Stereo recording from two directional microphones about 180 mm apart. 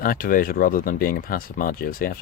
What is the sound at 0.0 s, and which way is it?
Speech, 50° left (ahead or behind).